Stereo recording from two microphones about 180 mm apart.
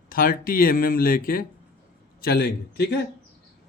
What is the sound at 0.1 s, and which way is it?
A man's voice, 55° left (ahead or behind).